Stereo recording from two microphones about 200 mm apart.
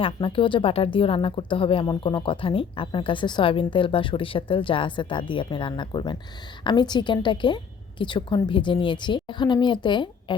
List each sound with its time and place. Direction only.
0.0 s a woman's voice: 25° left (ahead or behind)